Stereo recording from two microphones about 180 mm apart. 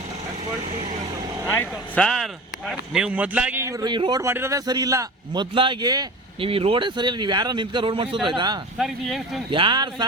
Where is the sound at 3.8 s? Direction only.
25° right (ahead or behind).